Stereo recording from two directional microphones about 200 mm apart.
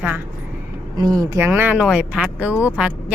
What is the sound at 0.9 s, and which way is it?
Speech, 20° right (ahead or behind).